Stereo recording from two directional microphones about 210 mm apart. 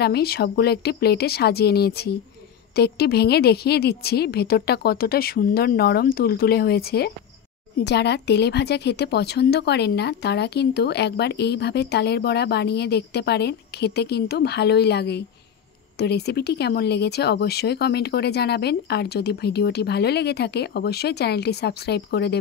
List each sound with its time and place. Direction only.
0.0 s a woman's voice: 50° left (ahead or behind)